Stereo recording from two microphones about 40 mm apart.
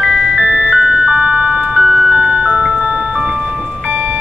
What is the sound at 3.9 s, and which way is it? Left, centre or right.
Music, right.